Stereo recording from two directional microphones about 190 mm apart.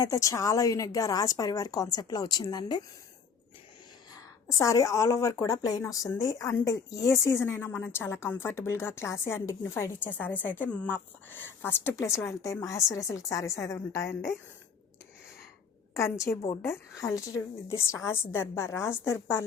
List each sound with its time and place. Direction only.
0.0 s a woman's voice: 15° left (ahead or behind)
4.1 s a woman's voice: 15° left (ahead or behind)
16.0 s a woman's voice: 15° left (ahead or behind)